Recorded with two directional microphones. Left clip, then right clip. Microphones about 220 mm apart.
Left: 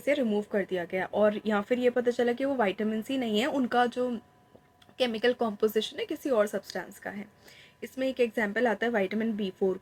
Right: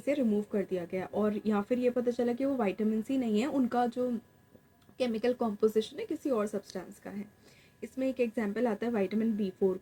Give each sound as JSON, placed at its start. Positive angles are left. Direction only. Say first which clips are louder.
{"t": 0.0, "sound": "speech", "louder": "left 3 dB", "side_deg": 10}